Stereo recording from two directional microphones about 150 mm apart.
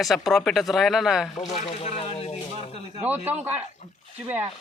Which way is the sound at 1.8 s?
40° left (ahead or behind).